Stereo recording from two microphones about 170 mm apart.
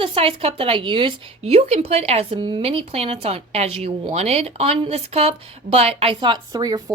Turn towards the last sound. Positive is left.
turn(degrees=-25)  # may be behind; listen again after turning